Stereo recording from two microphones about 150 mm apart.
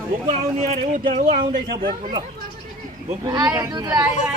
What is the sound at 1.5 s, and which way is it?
Speech, 75° right (ahead or behind).